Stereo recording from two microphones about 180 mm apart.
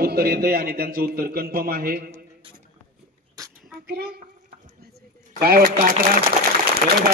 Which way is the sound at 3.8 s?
60° right (ahead or behind).